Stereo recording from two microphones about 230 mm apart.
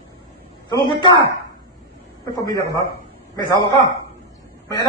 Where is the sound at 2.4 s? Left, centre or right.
Centre.